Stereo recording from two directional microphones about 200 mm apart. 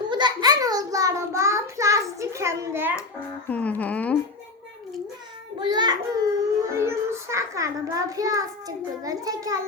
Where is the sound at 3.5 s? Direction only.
5° left (ahead or behind).